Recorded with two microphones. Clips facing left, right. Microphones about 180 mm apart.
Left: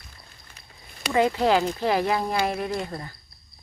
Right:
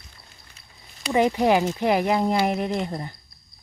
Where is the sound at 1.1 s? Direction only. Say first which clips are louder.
Right 1 dB; 15° right (ahead or behind).